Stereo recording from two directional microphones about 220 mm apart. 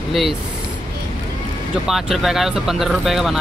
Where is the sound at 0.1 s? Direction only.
Centre (ahead or behind).